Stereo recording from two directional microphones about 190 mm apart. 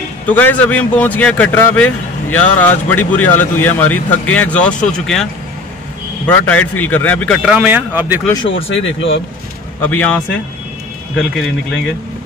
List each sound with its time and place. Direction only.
0.3 s a man's voice: 10° left (ahead or behind); by 8.2 s 10° right (ahead or behind)
8.4 s speech: 30° left (ahead or behind)
8.8 s speech: 90° left
9.8 s speech: 10° left (ahead or behind)